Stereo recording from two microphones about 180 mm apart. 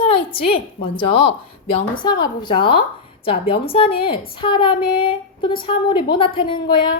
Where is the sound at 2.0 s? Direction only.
25° left (ahead or behind).